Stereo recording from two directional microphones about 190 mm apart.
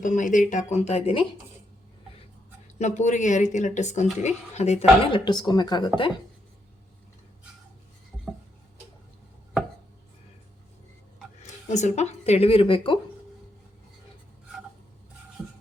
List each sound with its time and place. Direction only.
0.0 s speech: 45° left (ahead or behind)
2.7 s speech: 40° left (ahead or behind)
5.2 s a woman's voice: 20° left (ahead or behind)
11.4 s speech: 40° left (ahead or behind)
15.4 s music: 5° right (ahead or behind)